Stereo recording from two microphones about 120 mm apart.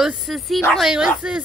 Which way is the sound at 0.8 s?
5° right (ahead or behind).